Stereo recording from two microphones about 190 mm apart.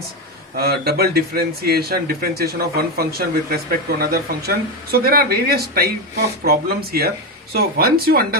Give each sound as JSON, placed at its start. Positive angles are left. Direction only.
{"t": 0.5, "sound": "speech", "side_deg": -55}